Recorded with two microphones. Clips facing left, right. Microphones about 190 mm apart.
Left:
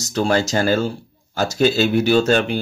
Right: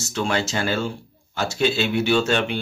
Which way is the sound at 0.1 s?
40° left (ahead or behind).